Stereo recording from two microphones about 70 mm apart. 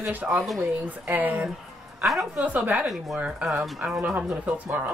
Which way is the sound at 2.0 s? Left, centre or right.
Centre.